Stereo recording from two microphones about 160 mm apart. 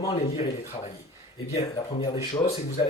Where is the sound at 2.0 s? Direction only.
35° left (ahead or behind).